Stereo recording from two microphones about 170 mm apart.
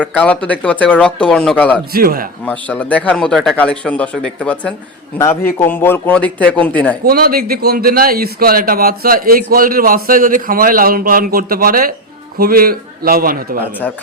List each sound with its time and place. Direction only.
0.0 s speech: 10° left (ahead or behind)
1.9 s a man's voice: 60° right (ahead or behind)
2.4 s speech: 10° left (ahead or behind)
7.0 s a man's voice: 60° right (ahead or behind)